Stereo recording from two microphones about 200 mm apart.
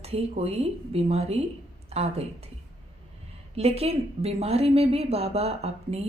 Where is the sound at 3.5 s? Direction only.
30° right (ahead or behind).